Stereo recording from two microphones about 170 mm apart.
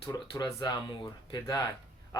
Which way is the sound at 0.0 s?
25° left (ahead or behind).